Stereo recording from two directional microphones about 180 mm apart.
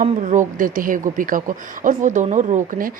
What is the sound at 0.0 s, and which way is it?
Speech, 45° right (ahead or behind).